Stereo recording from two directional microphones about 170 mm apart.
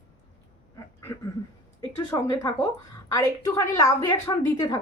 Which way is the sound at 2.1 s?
25° left (ahead or behind).